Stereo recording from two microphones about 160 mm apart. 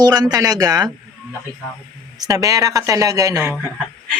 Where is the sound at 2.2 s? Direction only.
20° right (ahead or behind).